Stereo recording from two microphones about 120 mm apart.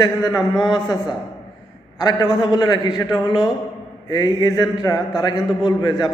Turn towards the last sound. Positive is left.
turn(degrees=35)  # may be behind; listen again after turning